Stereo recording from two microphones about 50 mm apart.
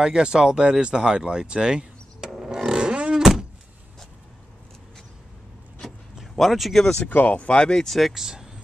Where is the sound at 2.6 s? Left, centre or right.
Centre.